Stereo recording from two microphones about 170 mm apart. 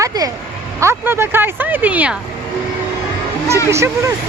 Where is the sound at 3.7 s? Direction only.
15° right (ahead or behind).